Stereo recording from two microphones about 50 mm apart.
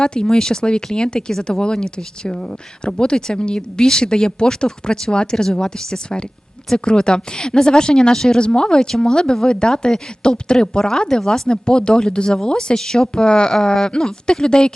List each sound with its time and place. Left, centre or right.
0.0 s a woman's voice: centre